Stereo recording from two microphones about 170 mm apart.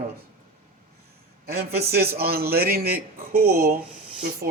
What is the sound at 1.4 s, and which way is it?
Speech, 65° right (ahead or behind).